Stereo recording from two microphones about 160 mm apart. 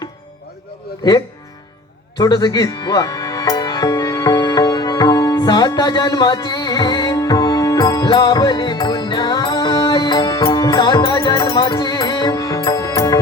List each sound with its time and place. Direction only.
2.1 s music: 25° left (ahead or behind)